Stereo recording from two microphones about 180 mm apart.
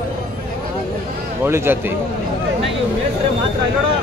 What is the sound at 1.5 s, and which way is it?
Speech, 15° right (ahead or behind).